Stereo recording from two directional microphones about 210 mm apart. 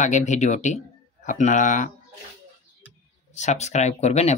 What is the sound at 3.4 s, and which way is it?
Speech, 35° left (ahead or behind).